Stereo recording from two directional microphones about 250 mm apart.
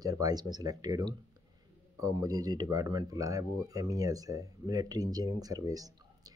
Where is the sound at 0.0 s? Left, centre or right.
Centre.